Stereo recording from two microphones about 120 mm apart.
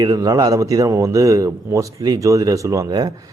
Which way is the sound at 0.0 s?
30° right (ahead or behind).